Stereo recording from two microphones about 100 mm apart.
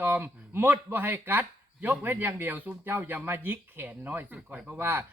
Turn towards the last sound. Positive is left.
turn(degrees=-20)  # may be behind; listen again after turning